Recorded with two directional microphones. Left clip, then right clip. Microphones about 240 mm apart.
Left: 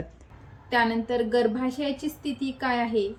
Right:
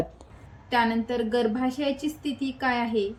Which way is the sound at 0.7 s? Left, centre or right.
Centre.